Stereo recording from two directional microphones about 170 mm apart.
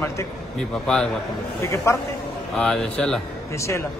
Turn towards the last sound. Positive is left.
turn(degrees=15)  # may be behind; listen again after turning